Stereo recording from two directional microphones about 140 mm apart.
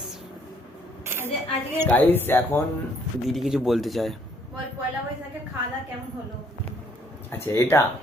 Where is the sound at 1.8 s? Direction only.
10° left (ahead or behind).